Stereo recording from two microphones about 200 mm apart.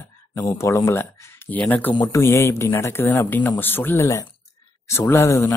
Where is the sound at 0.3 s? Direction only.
15° left (ahead or behind).